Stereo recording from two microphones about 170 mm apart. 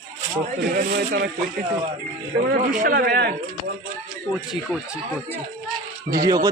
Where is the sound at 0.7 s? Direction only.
60° right (ahead or behind).